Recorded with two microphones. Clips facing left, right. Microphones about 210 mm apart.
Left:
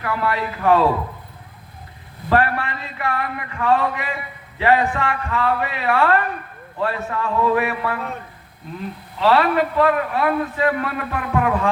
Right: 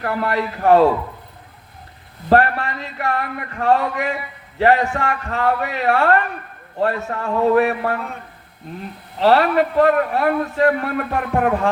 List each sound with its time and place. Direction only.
0.0 s a man's voice: 45° right (ahead or behind)
2.3 s a man's voice: 40° right (ahead or behind)
9.1 s a man's voice: 40° right (ahead or behind)